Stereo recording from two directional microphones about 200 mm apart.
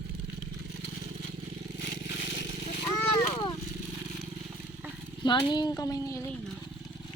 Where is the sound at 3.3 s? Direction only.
20° left (ahead or behind).